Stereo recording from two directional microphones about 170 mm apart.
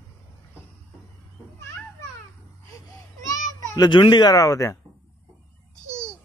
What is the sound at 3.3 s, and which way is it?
A child's voice, 20° left (ahead or behind).